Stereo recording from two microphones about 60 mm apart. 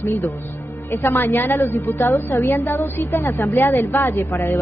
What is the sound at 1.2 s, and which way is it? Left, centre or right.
A woman's voice, left.